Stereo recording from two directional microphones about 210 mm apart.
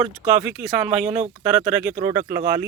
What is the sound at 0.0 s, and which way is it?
Speech, 5° right (ahead or behind).